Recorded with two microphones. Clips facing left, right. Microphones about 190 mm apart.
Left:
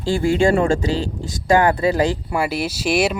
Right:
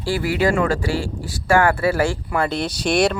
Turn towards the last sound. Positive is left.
turn(degrees=5)  # may be behind; listen again after turning